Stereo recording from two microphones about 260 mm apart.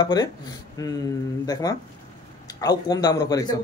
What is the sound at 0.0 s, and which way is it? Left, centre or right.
Speech, centre.